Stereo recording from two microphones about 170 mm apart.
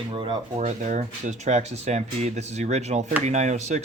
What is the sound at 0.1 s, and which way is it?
Speech, 30° right (ahead or behind).